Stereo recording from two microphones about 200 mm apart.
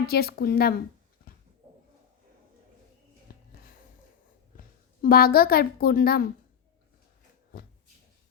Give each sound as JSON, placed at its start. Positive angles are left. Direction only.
{"t": 0.1, "sound": "a woman's voice", "side_deg": 50}
{"t": 3.3, "sound": "music", "side_deg": 45}
{"t": 5.0, "sound": "a woman's voice", "side_deg": 50}